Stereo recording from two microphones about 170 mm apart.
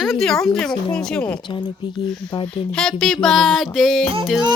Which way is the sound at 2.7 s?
5° left (ahead or behind).